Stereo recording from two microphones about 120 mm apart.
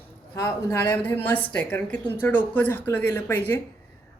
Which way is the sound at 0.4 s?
20° left (ahead or behind).